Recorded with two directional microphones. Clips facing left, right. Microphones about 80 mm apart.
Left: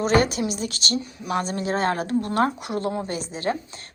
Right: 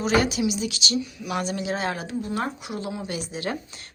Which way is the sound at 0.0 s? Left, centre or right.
Left.